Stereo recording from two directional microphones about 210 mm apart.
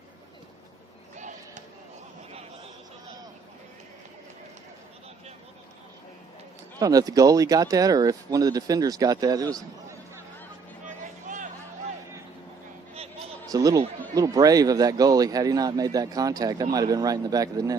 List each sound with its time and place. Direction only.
1.1 s a sound: 35° right (ahead or behind)
6.7 s speech: 15° right (ahead or behind)
13.5 s speech: 15° right (ahead or behind)